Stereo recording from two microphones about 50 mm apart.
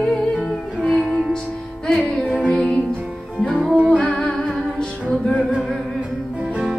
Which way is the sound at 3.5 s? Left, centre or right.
Left.